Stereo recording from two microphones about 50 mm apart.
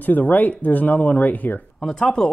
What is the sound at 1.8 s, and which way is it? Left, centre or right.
Speech, centre.